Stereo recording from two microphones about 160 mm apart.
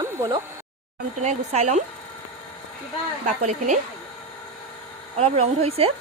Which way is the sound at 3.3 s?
50° right (ahead or behind).